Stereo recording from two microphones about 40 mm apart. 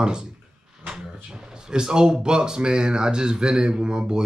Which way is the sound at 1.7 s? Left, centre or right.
Centre.